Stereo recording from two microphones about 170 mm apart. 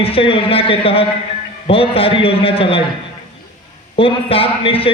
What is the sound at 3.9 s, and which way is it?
A man's voice, 35° left (ahead or behind).